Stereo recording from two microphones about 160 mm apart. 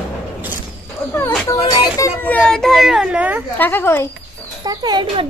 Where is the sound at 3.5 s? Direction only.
10° left (ahead or behind).